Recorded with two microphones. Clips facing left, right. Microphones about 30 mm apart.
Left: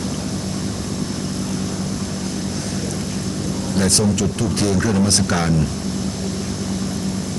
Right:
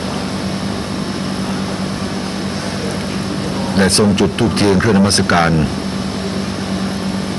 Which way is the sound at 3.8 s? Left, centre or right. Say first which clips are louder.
Right 6 dB; right.